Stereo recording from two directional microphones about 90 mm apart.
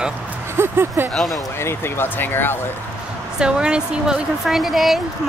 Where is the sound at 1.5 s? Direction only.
30° left (ahead or behind).